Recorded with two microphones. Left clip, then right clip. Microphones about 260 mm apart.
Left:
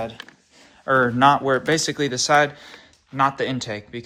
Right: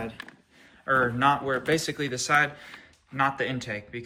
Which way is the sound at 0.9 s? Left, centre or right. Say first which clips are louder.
Left 6 dB; left.